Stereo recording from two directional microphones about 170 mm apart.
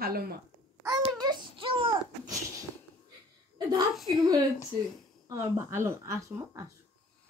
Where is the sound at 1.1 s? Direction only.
25° right (ahead or behind).